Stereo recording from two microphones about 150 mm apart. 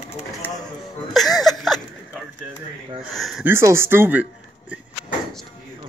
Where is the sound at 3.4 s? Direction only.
15° right (ahead or behind).